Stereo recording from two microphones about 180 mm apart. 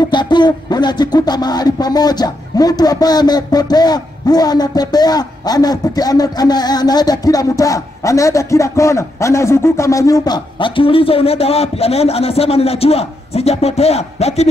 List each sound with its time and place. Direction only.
0.1 s speech: 25° left (ahead or behind)